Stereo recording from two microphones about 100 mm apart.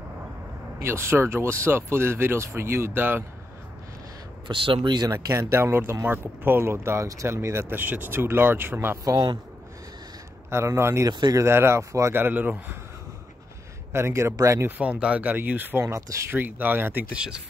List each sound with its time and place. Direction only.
0.7 s speech: 25° right (ahead or behind)
4.5 s speech: 60° right (ahead or behind)
5.1 s speech: 30° right (ahead or behind)
10.5 s speech: 25° right (ahead or behind)
11.1 s speech: 45° right (ahead or behind)
11.4 s speech: 25° right (ahead or behind)
13.9 s speech: 25° right (ahead or behind)
14.8 s speech: 10° right (ahead or behind)
15.8 s speech: 30° right (ahead or behind)
16.3 s speech: 20° right (ahead or behind)